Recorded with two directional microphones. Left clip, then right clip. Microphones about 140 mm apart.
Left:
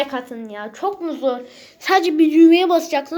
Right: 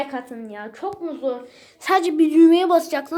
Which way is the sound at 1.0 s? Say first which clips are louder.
Left 3 dB; 40° left (ahead or behind).